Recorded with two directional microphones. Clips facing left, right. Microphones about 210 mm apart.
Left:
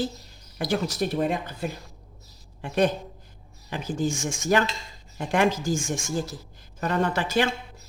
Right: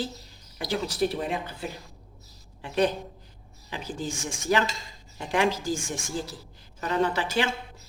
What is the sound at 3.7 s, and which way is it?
Speech, 45° left (ahead or behind).